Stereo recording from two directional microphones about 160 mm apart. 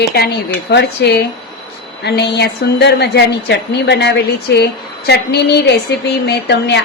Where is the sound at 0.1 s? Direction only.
90° left.